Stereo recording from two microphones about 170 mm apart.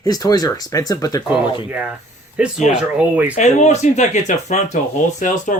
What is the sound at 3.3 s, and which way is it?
Speech, 45° left (ahead or behind).